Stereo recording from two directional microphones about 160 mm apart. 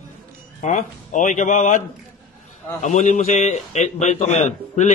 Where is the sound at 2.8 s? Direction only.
45° left (ahead or behind).